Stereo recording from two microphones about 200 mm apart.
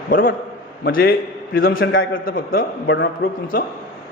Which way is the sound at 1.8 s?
80° left.